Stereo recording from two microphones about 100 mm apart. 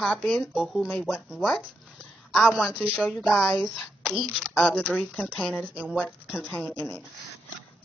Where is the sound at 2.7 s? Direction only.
15° right (ahead or behind).